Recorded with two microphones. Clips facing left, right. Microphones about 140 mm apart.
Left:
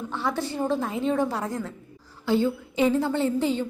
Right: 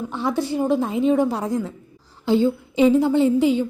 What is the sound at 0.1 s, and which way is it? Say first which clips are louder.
A woman's voice: right 5 dB; 15° right (ahead or behind).